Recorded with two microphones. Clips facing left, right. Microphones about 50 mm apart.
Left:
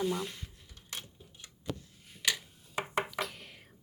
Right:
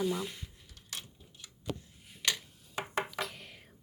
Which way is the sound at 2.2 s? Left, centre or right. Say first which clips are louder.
Left 1 dB; centre.